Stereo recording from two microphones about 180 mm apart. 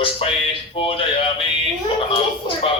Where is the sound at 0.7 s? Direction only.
30° left (ahead or behind).